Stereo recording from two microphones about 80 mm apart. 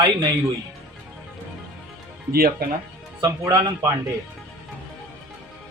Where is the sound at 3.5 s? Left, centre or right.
Right.